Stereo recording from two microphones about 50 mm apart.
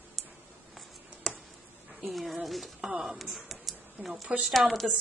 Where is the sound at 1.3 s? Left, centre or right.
Centre.